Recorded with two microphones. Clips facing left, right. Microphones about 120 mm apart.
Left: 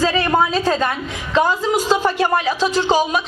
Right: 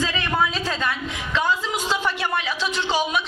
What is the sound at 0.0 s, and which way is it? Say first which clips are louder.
A woman's voice: left 7 dB; 40° left (ahead or behind).